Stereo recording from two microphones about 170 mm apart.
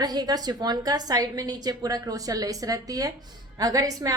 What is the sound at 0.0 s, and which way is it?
A woman's voice, 25° right (ahead or behind).